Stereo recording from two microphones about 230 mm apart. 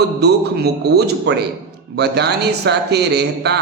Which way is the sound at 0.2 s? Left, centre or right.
Right.